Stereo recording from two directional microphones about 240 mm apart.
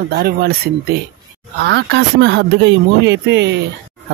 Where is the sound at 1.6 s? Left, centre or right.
Right.